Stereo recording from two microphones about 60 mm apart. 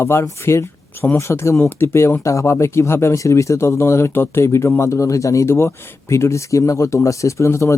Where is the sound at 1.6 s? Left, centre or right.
Left.